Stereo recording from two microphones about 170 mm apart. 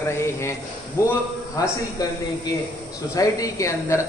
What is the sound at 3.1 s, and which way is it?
Speech, 20° left (ahead or behind).